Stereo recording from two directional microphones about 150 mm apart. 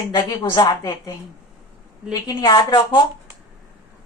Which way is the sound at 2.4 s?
25° left (ahead or behind).